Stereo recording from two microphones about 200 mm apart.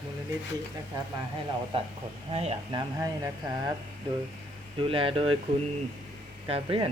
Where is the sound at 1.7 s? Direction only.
25° right (ahead or behind).